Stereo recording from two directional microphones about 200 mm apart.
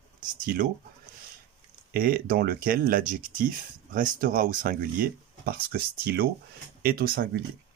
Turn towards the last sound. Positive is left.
turn(degrees=-45)  # may be behind; listen again after turning